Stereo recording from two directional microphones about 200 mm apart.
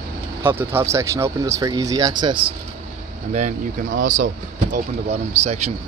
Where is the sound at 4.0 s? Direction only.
40° right (ahead or behind).